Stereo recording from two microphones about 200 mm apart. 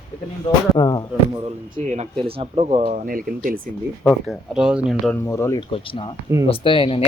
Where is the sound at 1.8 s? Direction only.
35° right (ahead or behind).